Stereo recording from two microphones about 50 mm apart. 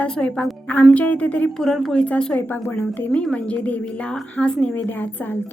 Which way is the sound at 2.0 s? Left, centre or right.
Centre.